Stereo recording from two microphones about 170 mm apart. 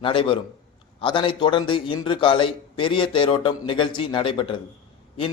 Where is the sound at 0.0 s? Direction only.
30° left (ahead or behind).